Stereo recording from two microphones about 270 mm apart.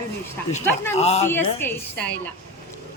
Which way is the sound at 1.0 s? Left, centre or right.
Left.